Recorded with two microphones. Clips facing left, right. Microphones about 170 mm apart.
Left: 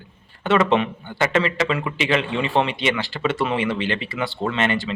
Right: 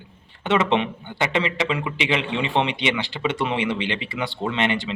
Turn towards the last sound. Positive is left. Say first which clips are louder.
# left 1 dB
turn(degrees=-20)  # may be behind; listen again after turning